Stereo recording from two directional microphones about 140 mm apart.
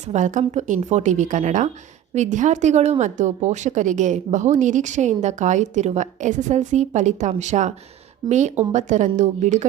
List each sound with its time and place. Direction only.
0.1 s a woman's voice: 65° right (ahead or behind)